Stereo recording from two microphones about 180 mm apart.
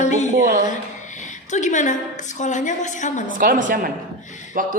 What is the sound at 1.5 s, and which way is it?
A woman's voice, 40° left (ahead or behind).